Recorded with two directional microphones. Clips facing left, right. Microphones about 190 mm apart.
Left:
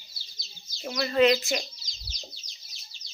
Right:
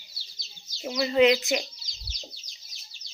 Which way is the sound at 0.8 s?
10° right (ahead or behind).